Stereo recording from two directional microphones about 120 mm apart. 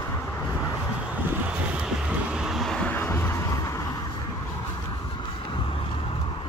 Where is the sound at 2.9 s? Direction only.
20° left (ahead or behind).